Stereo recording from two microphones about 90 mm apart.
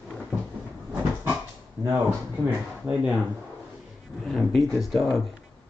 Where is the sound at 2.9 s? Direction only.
20° right (ahead or behind).